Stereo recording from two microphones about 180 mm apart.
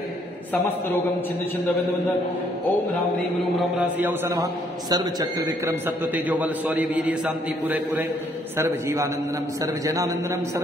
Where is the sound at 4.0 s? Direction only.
10° right (ahead or behind).